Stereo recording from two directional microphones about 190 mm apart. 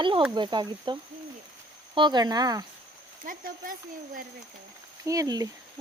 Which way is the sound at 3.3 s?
50° right (ahead or behind).